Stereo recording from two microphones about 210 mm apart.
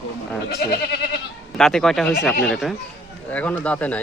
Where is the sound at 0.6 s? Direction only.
50° left (ahead or behind).